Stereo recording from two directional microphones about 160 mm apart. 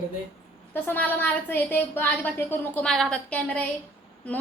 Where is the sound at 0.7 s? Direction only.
10° left (ahead or behind).